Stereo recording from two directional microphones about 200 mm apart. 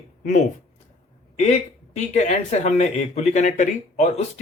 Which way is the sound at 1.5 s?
35° left (ahead or behind).